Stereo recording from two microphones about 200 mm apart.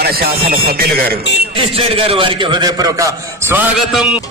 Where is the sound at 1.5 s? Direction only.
30° right (ahead or behind); by 4.2 s centre (ahead or behind).